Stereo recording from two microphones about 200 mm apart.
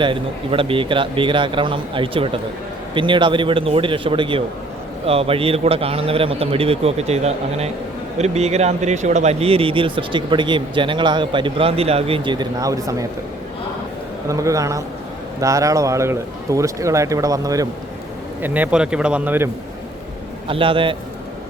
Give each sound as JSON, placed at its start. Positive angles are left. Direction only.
{"t": 0.0, "sound": "speech", "side_deg": -25}
{"t": 14.3, "sound": "speech", "side_deg": -15}
{"t": 20.5, "sound": "speech", "side_deg": -25}